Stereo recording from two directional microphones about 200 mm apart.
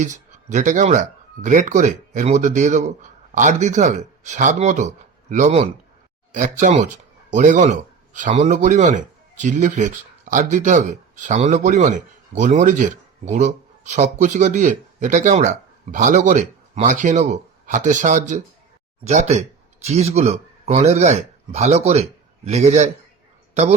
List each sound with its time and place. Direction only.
0.0 s speech: 40° right (ahead or behind)